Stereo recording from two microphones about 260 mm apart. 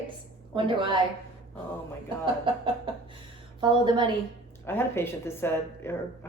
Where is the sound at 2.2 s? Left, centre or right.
Centre.